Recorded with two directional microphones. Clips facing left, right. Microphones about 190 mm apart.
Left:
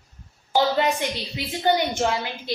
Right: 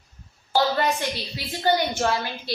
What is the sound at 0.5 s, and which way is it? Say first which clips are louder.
A woman's voice: left 1 dB; 20° left (ahead or behind).